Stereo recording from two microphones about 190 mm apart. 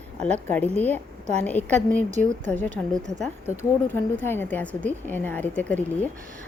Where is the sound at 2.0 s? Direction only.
40° right (ahead or behind).